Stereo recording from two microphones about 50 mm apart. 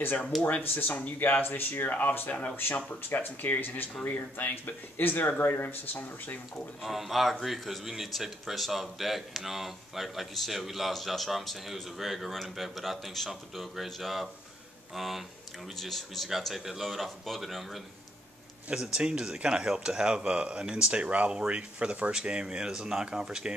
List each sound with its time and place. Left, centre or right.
0.0 s speech: left
6.8 s speech: centre
18.9 s speech: centre